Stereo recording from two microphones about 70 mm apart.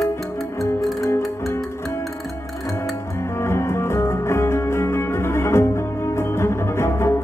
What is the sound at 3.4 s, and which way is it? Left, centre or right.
Music, left.